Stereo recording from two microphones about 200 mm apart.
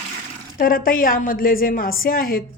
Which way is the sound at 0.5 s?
45° left (ahead or behind).